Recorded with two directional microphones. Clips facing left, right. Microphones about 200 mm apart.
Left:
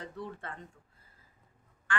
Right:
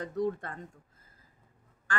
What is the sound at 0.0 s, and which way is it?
Speech, 45° right (ahead or behind).